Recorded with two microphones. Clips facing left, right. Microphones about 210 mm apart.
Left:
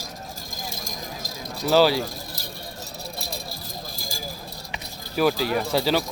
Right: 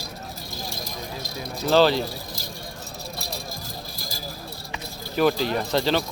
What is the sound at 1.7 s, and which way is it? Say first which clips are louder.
Speech: even; 10° left (ahead or behind).